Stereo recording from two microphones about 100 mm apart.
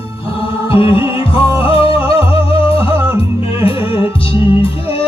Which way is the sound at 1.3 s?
65° left (ahead or behind).